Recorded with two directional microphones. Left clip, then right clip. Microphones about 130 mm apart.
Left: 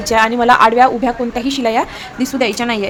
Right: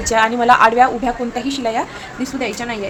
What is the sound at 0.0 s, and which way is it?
A woman's voice, 35° left (ahead or behind).